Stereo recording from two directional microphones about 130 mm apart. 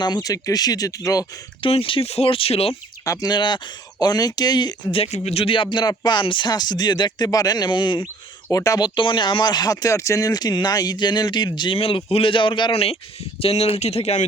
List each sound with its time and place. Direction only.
0.0 s speech: 30° left (ahead or behind)
1.6 s speech: 45° left (ahead or behind)
3.0 s speech: 25° left (ahead or behind)
4.9 s speech: 50° left (ahead or behind)
8.4 s speech: 25° left (ahead or behind); by 14.3 s 55° left (ahead or behind)